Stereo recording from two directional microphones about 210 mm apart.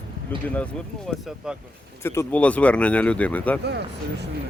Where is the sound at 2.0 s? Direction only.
10° left (ahead or behind).